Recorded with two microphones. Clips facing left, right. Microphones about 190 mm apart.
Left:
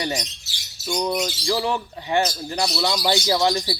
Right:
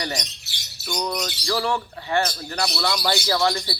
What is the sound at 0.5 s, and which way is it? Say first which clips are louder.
Bird: right 1 dB; 60° right (ahead or behind).